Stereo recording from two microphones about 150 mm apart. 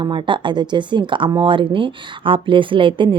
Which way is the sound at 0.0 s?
30° right (ahead or behind).